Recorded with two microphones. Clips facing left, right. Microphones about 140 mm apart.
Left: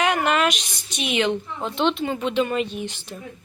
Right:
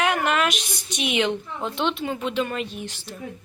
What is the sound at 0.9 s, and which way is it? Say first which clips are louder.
A woman's voice: left 1 dB; 15° right (ahead or behind).